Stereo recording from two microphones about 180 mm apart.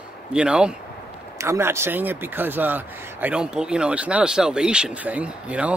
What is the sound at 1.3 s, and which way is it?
Speech, 15° right (ahead or behind).